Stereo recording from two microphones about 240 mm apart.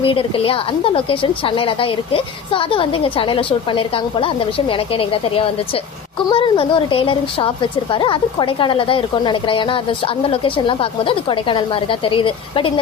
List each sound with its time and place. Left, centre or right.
0.0 s a woman's voice: left